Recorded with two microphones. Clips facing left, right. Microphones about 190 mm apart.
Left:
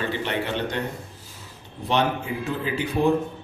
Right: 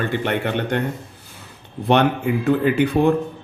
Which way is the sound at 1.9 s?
60° right (ahead or behind).